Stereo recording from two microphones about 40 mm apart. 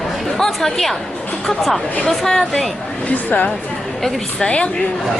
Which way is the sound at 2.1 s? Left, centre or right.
Centre.